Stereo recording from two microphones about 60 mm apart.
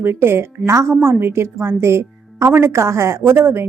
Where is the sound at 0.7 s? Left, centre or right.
Right.